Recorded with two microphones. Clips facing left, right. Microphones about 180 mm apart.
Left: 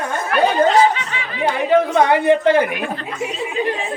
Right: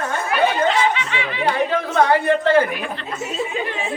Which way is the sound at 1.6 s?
15° left (ahead or behind).